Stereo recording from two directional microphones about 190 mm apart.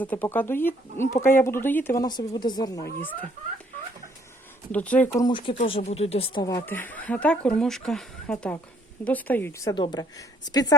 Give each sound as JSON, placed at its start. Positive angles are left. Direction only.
{"t": 0.0, "sound": "speech", "side_deg": 10}
{"t": 4.7, "sound": "speech", "side_deg": 5}
{"t": 5.3, "sound": "speech", "side_deg": 25}